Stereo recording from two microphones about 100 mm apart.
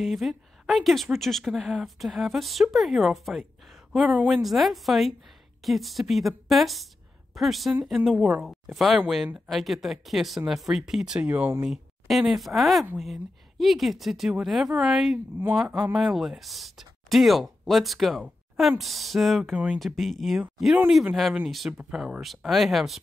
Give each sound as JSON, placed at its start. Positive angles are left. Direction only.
{"t": 0.0, "sound": "speech", "side_deg": 0}
{"t": 8.5, "sound": "speech", "side_deg": 0}
{"t": 11.3, "sound": "speech", "side_deg": -20}
{"t": 11.6, "sound": "speech", "side_deg": 0}
{"t": 19.5, "sound": "speech", "side_deg": -10}
{"t": 19.8, "sound": "speech", "side_deg": 0}